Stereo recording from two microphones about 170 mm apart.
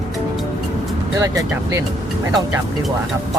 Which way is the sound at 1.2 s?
20° right (ahead or behind).